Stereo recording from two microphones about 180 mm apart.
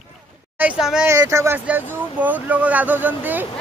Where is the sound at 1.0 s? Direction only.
15° right (ahead or behind).